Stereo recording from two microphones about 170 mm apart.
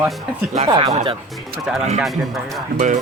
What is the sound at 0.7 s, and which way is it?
Speech, 25° right (ahead or behind).